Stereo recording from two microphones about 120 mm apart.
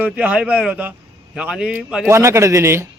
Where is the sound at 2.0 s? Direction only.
25° right (ahead or behind).